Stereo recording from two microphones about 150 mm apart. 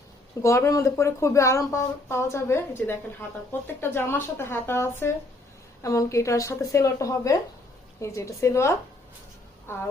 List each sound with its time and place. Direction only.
0.4 s speech: 20° left (ahead or behind)